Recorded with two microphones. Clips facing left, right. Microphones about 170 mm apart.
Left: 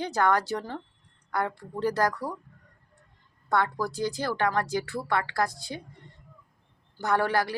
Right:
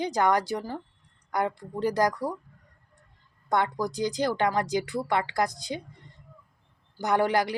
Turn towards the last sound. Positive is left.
turn(degrees=-15)  # may be behind; listen again after turning